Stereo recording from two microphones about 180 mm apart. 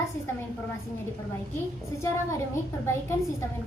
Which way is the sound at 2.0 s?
15° left (ahead or behind).